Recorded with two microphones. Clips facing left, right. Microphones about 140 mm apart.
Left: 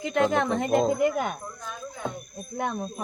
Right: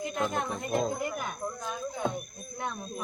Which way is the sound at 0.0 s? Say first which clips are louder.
Left 7 dB; 85° left.